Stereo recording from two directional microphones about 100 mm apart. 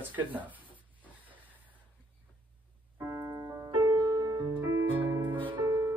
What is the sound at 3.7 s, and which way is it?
Music, 55° right (ahead or behind).